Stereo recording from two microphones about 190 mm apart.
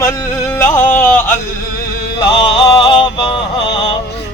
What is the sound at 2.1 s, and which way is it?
Music, 25° left (ahead or behind).